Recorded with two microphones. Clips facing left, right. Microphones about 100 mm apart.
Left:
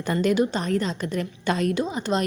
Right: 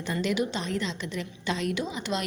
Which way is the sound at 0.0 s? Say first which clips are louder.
Left 6 dB; 50° left (ahead or behind).